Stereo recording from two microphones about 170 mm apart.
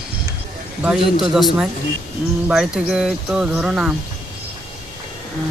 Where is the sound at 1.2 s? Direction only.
5° right (ahead or behind).